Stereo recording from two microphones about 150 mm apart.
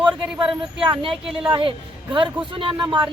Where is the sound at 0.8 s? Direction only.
35° right (ahead or behind).